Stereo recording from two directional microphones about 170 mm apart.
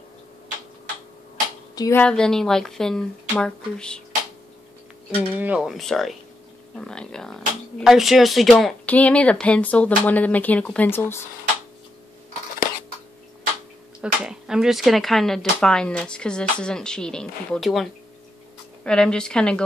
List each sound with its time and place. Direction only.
1.8 s speech: 15° left (ahead or behind)
2.0 s speech: 5° left (ahead or behind)
5.3 s speech: 10° right (ahead or behind); by 11.2 s 15° left (ahead or behind)
14.0 s speech: 5° right (ahead or behind)
18.9 s speech: 5° left (ahead or behind)